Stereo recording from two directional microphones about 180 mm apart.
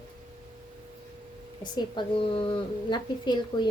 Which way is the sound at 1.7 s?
30° left (ahead or behind).